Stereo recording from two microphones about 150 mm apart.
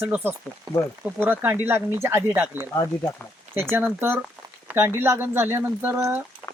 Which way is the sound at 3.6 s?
15° right (ahead or behind).